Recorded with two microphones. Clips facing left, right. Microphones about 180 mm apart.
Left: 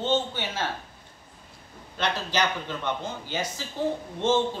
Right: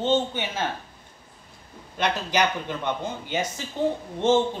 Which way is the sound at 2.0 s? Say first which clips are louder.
Right 3 dB; 15° right (ahead or behind).